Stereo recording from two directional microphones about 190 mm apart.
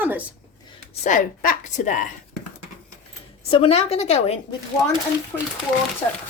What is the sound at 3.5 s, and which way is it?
Speech, 30° left (ahead or behind).